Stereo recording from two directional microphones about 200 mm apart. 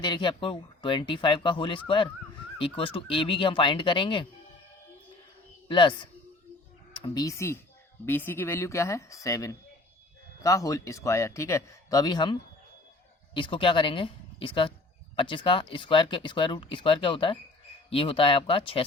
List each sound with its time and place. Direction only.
0.0 s speech: 20° left (ahead or behind)
5.6 s speech: 25° left (ahead or behind)